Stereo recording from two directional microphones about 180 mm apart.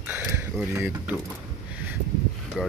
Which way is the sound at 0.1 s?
10° right (ahead or behind).